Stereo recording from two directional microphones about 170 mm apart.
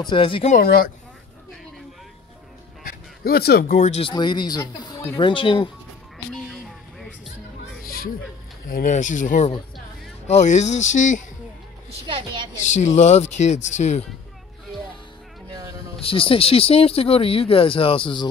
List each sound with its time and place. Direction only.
0.1 s speech: 30° left (ahead or behind)
0.5 s speech: 60° left (ahead or behind)
2.8 s speech: 60° left (ahead or behind)
4.0 s speech: 25° left (ahead or behind)
6.3 s music: centre (ahead or behind)
7.8 s music: 60° left (ahead or behind)
8.6 s speech: 50° left (ahead or behind)
12.1 s a woman's voice: 30° right (ahead or behind)
12.6 s speech: 45° left (ahead or behind)
16.0 s speech: 30° left (ahead or behind)